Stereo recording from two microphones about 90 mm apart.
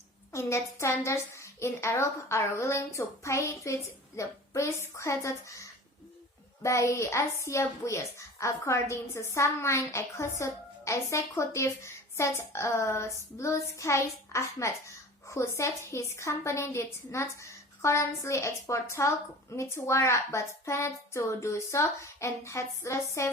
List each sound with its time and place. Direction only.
0.3 s a woman's voice: 30° left (ahead or behind)